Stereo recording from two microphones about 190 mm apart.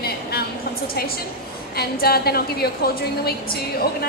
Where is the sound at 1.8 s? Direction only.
55° left (ahead or behind).